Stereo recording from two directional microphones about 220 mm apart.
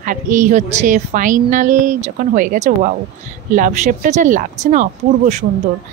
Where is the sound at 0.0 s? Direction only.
35° right (ahead or behind).